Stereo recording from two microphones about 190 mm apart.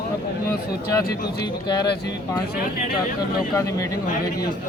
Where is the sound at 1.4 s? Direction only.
20° left (ahead or behind).